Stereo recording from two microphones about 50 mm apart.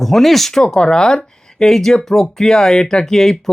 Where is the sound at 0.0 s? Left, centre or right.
Centre.